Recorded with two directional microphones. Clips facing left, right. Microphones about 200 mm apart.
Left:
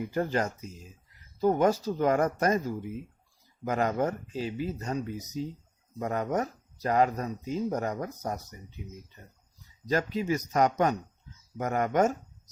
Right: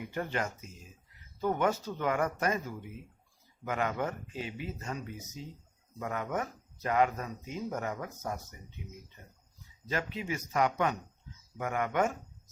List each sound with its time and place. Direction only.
0.1 s speech: 35° left (ahead or behind)
9.8 s speech: 40° left (ahead or behind)